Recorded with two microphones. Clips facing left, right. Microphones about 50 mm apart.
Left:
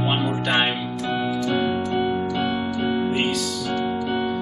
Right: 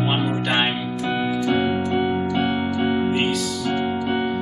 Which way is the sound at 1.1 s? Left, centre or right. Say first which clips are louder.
Right 2 dB; centre.